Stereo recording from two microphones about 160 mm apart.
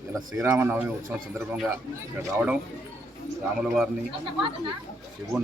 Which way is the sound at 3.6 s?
5° right (ahead or behind).